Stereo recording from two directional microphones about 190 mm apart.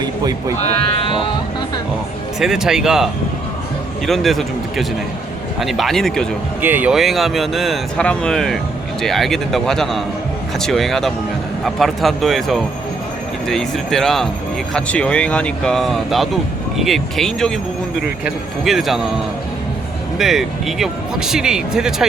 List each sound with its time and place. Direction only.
0.0 s speech: 20° right (ahead or behind)
0.8 s speech: 30° left (ahead or behind)
2.4 s speech: centre (ahead or behind)
6.6 s speech: 10° right (ahead or behind)
18.6 s speech: centre (ahead or behind)
20.1 s speech: centre (ahead or behind)